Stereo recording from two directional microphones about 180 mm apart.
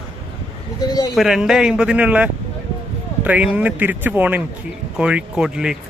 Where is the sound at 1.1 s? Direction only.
Centre (ahead or behind).